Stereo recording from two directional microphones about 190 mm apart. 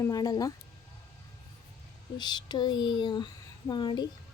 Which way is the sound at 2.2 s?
20° left (ahead or behind).